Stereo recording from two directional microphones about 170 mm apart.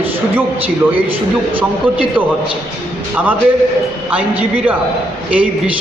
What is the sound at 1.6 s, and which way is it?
Speech, 10° right (ahead or behind).